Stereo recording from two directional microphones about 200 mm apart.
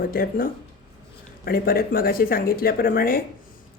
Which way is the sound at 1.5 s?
45° left (ahead or behind).